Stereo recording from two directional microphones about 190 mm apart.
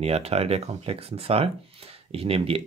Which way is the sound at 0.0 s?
35° right (ahead or behind).